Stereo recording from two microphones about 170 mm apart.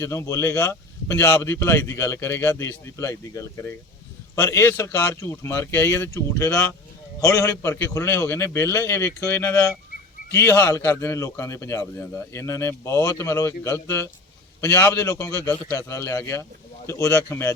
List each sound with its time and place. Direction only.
0.0 s a man's voice: 15° left (ahead or behind)